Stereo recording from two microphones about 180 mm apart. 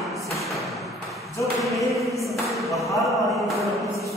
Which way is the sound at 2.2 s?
Centre (ahead or behind).